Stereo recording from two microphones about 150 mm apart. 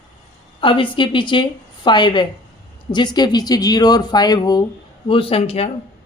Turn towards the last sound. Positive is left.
turn(degrees=40)  # may be behind; listen again after turning